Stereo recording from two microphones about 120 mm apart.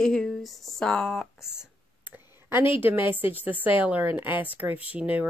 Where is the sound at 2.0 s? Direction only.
15° right (ahead or behind).